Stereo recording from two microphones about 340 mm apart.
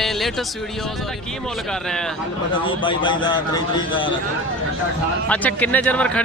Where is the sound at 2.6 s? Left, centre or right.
Centre.